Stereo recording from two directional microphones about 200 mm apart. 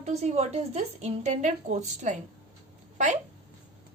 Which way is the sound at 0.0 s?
35° right (ahead or behind).